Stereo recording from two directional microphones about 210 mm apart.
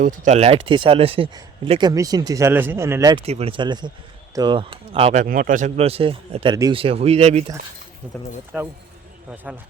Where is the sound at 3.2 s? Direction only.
30° right (ahead or behind).